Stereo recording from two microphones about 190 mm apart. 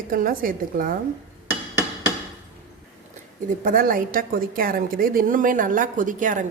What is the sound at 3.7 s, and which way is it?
A woman's voice, 45° right (ahead or behind).